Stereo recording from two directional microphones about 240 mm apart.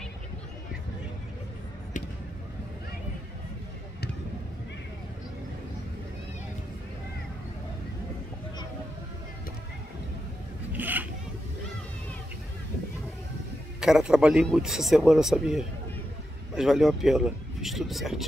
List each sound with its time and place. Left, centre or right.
2.0 s a sound: left
10.7 s zipper: centre
13.7 s speech: centre